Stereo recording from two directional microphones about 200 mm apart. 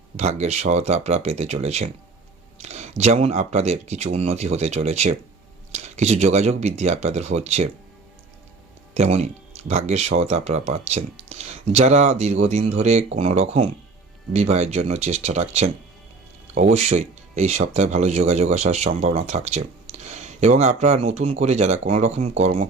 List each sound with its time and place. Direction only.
0.2 s speech: 35° right (ahead or behind)
2.6 s a sound: 35° right (ahead or behind)
3.0 s speech: 30° right (ahead or behind)
9.0 s speech: 35° right (ahead or behind)